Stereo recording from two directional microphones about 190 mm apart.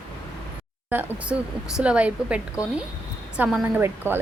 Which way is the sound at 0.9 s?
10° right (ahead or behind).